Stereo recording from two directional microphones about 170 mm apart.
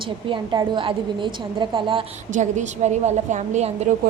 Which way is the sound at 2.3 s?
45° right (ahead or behind).